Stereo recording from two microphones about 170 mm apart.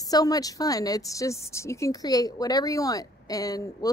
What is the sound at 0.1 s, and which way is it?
Speech, 20° left (ahead or behind).